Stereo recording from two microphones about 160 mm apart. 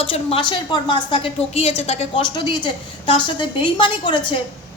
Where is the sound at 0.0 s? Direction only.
35° left (ahead or behind).